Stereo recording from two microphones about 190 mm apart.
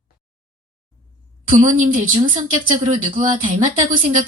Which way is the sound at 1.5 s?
45° right (ahead or behind).